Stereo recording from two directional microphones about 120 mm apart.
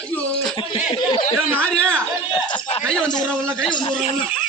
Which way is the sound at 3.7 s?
40° left (ahead or behind).